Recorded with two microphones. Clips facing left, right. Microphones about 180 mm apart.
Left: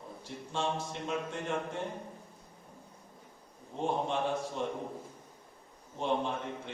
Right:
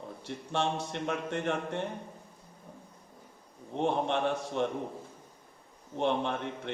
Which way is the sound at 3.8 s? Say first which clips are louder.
Right 3 dB; 70° right (ahead or behind).